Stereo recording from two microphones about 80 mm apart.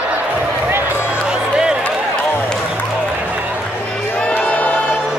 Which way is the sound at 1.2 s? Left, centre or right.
Centre.